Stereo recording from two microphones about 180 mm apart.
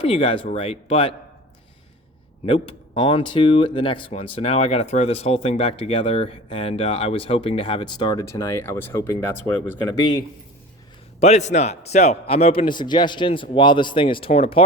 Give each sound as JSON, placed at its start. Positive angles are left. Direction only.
{"t": 0.0, "sound": "speech", "side_deg": 30}
{"t": 2.5, "sound": "speech", "side_deg": 30}
{"t": 11.2, "sound": "speech", "side_deg": 40}